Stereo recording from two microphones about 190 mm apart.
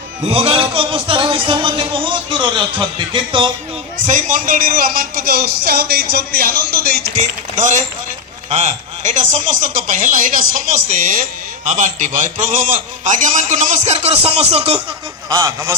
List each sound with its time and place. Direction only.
0.3 s speech: 30° right (ahead or behind)
4.0 s a man's voice: 40° right (ahead or behind)
7.2 s a man's voice: 40° right (ahead or behind)
15.3 s speech: 15° right (ahead or behind)